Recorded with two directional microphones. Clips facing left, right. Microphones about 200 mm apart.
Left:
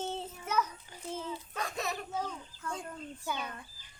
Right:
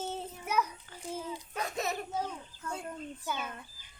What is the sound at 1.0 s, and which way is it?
A child's voice, 10° right (ahead or behind).